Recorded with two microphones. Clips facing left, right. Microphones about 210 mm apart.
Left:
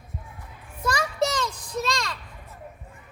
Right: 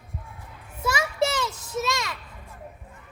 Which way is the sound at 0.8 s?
5° right (ahead or behind).